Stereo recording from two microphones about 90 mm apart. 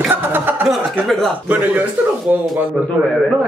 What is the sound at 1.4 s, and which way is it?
Speech, 20° right (ahead or behind).